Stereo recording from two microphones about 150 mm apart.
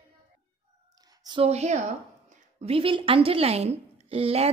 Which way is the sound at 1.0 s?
25° right (ahead or behind).